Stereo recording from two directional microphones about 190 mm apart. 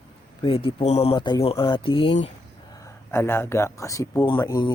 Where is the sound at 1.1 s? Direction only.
25° left (ahead or behind).